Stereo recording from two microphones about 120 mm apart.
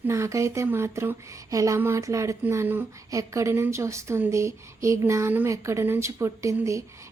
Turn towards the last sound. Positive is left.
turn(degrees=-25)  # may be behind; listen again after turning